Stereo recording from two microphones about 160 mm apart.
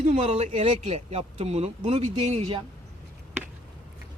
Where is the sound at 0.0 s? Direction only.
40° right (ahead or behind).